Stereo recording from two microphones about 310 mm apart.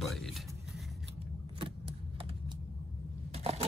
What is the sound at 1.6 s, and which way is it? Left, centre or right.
Vehicle, centre.